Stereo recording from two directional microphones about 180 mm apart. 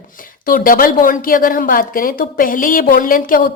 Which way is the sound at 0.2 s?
50° left (ahead or behind).